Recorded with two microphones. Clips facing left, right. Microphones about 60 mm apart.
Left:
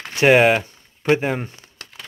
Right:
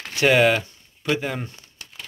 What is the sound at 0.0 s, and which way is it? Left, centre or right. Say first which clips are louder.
Speech: left 3 dB; left.